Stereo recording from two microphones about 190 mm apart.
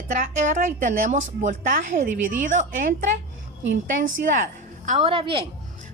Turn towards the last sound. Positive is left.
turn(degrees=-30)  # may be behind; listen again after turning